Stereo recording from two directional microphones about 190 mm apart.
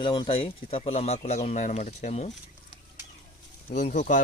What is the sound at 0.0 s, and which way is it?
Speech, 25° left (ahead or behind).